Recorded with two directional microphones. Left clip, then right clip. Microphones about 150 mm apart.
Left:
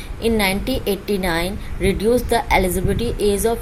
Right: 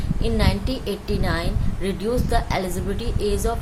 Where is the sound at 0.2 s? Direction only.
30° left (ahead or behind).